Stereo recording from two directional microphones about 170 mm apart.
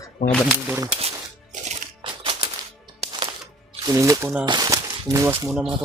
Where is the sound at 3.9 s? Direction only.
20° right (ahead or behind).